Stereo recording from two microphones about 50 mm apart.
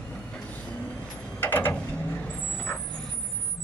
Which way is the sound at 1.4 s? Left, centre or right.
Left.